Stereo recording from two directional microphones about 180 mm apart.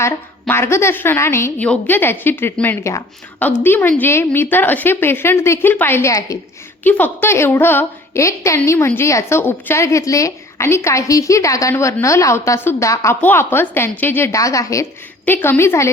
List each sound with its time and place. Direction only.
0.0 s a woman's voice: 15° left (ahead or behind)